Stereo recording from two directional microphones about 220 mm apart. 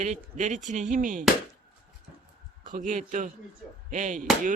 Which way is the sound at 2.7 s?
35° right (ahead or behind).